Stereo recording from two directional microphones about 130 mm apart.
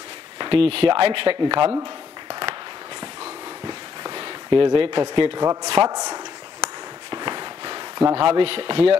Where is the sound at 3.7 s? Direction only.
35° right (ahead or behind).